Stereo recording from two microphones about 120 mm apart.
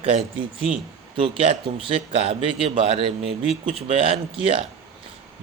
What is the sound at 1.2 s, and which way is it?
Speech, 45° right (ahead or behind).